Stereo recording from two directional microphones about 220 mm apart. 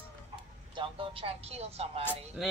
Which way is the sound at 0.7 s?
25° right (ahead or behind).